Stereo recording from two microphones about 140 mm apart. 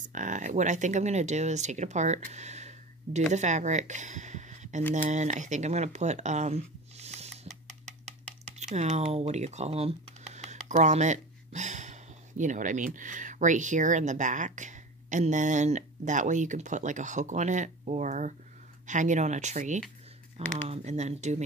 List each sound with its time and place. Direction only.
0.0 s speech: 65° right (ahead or behind)
8.5 s speech: 55° right (ahead or behind)